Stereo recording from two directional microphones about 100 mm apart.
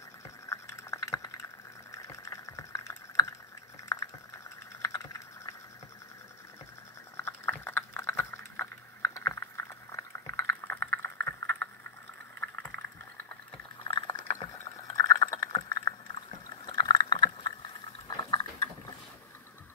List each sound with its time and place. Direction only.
0.5 s a sound: 30° left (ahead or behind)
4.8 s computer keyboard: 35° left (ahead or behind)
7.2 s a sound: 25° left (ahead or behind)
12.4 s boiling: 20° left (ahead or behind)
13.8 s boiling: 55° left (ahead or behind)
15.0 s liquid: 35° left (ahead or behind)
16.6 s liquid: 55° left (ahead or behind)